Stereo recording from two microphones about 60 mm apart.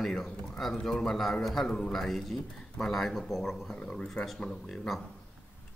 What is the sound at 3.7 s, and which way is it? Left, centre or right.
Speech, centre.